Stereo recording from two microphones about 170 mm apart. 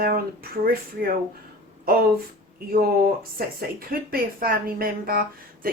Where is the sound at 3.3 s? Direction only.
60° right (ahead or behind).